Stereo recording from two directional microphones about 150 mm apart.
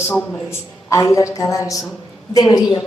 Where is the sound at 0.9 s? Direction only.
20° left (ahead or behind).